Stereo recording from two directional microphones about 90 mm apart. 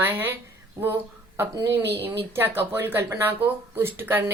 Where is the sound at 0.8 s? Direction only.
30° right (ahead or behind).